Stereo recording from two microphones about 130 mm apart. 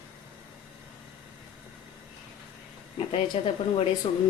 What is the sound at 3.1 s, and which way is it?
Speech, 50° left (ahead or behind).